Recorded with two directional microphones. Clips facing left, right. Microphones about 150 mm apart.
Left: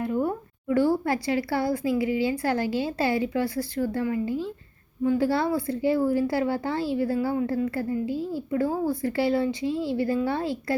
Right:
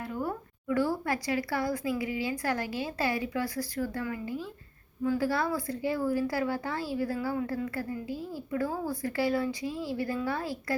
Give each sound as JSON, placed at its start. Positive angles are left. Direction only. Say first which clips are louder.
{"t": 0.0, "sound": "a woman's voice", "louder": "left 8 dB", "side_deg": 20}